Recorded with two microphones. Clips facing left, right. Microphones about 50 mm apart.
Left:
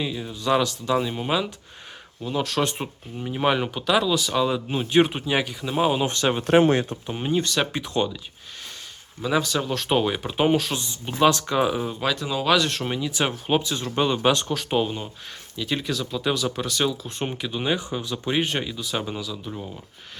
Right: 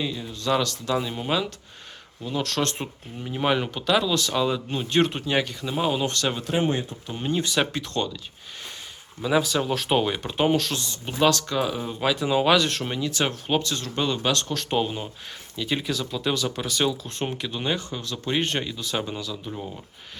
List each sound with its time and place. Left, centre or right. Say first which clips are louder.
0.0 s speech: left 1 dB; centre
6.5 s speech: left 8 dB; left
7.1 s speech: even; centre
7.3 s speech: left 1 dB; centre
7.7 s speech: left 3 dB; centre
9.2 s speech: right 1 dB; centre
11.9 s speech: right 1 dB; centre
12.2 s speech: right 3 dB; centre
12.5 s speech: even; centre